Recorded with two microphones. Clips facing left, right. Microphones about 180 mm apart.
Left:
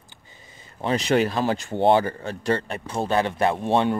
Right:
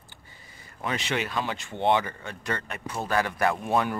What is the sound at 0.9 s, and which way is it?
Speech, 40° left (ahead or behind).